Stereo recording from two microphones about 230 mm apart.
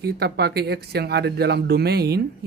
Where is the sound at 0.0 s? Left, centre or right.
Right.